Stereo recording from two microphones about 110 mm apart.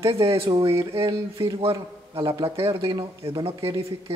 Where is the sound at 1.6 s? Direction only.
55° right (ahead or behind).